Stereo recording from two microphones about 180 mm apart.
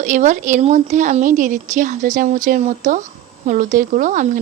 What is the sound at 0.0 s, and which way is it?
A woman's voice, 45° right (ahead or behind).